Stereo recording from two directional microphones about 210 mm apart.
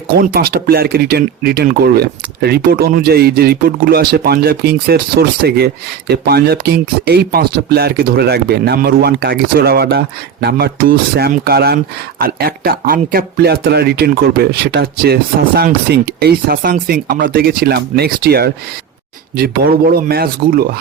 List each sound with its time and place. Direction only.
0.2 s speech: 45° right (ahead or behind)